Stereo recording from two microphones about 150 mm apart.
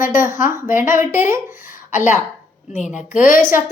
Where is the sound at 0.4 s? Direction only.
15° right (ahead or behind).